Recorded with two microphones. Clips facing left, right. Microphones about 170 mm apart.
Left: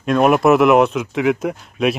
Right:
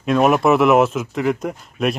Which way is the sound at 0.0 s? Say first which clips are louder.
Left 1 dB; centre (ahead or behind).